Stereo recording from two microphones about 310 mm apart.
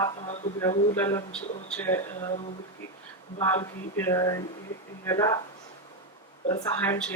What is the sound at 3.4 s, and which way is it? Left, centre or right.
Speech, centre.